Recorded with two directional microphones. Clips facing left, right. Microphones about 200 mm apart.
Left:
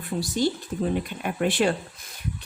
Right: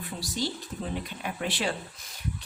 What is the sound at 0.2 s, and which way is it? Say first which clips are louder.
A woman's voice: left 8 dB; 50° left (ahead or behind).